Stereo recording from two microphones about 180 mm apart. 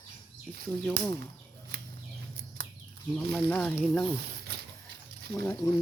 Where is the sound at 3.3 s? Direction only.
5° left (ahead or behind).